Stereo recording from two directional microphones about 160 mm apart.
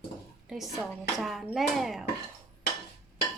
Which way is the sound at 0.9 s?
Centre (ahead or behind).